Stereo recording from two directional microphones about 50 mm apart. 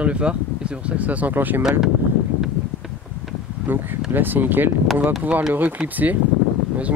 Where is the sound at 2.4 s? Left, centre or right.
Centre.